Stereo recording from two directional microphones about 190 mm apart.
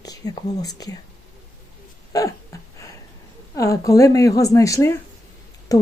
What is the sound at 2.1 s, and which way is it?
Speech, 20° left (ahead or behind).